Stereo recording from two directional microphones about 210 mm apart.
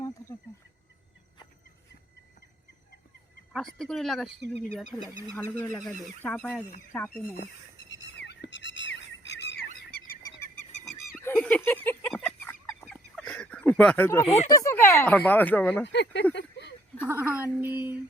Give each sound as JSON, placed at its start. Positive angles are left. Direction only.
{"t": 3.5, "sound": "speech", "side_deg": 0}
{"t": 4.3, "sound": "speech", "side_deg": -55}
{"t": 5.0, "sound": "speech", "side_deg": -15}
{"t": 5.3, "sound": "speech", "side_deg": 10}
{"t": 8.1, "sound": "bird", "side_deg": 55}
{"t": 11.2, "sound": "chicken", "side_deg": 10}
{"t": 14.3, "sound": "speech", "side_deg": 30}
{"t": 14.5, "sound": "speech", "side_deg": 15}
{"t": 15.9, "sound": "speech", "side_deg": 55}
{"t": 16.3, "sound": "a sound", "side_deg": 55}
{"t": 17.1, "sound": "speech", "side_deg": -10}